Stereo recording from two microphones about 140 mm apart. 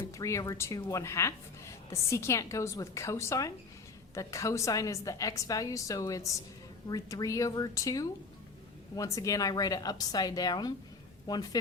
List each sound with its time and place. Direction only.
0.2 s speech: 20° left (ahead or behind)